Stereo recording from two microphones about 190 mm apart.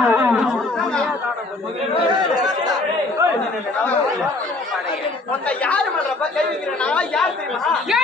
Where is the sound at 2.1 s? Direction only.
20° right (ahead or behind).